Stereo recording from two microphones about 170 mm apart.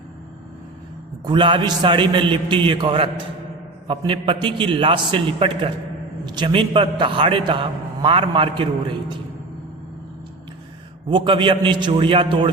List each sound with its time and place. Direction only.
1.2 s a man's voice: 30° right (ahead or behind)
11.1 s a man's voice: 30° right (ahead or behind)